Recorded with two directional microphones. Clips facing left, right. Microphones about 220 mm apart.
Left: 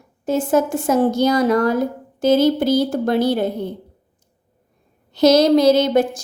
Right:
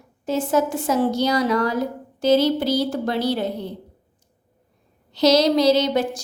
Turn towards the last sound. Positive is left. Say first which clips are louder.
# left 4 dB
turn(degrees=50)  # may be behind; listen again after turning